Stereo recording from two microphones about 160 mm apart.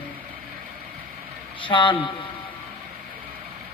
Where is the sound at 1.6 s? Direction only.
30° left (ahead or behind).